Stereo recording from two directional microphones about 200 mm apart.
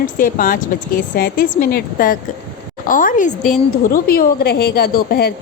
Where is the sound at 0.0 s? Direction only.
45° left (ahead or behind).